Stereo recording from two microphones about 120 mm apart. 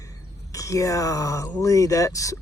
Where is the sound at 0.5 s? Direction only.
25° left (ahead or behind).